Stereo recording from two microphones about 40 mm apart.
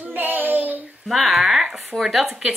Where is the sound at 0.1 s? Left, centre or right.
Right.